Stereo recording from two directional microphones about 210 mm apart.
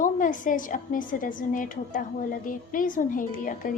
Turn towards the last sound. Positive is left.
turn(degrees=40)  # may be behind; listen again after turning